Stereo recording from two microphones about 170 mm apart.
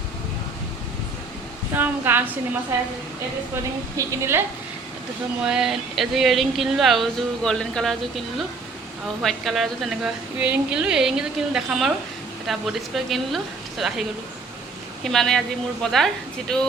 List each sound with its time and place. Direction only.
1.7 s a woman's voice: 10° right (ahead or behind)
3.5 s a woman's voice: 15° right (ahead or behind)
5.4 s speech: 5° right (ahead or behind)
15.0 s speech: centre (ahead or behind)